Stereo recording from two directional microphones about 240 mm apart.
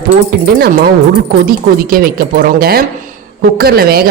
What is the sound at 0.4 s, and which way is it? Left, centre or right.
Speech, right.